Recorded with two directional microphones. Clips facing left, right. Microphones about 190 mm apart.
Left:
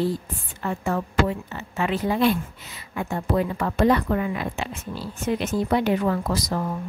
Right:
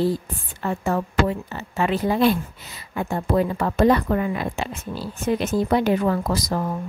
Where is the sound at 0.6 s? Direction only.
35° right (ahead or behind).